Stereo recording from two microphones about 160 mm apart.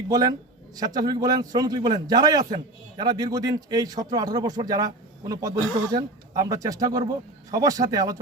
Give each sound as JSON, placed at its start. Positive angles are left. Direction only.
{"t": 0.1, "sound": "speech", "side_deg": -25}